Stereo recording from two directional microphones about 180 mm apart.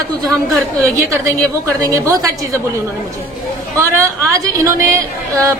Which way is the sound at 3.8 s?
15° right (ahead or behind).